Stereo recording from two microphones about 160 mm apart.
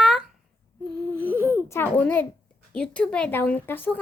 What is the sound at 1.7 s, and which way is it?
Speech, 10° left (ahead or behind).